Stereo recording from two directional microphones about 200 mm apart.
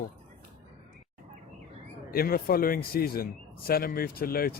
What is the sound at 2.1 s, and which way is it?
Speech, 50° left (ahead or behind).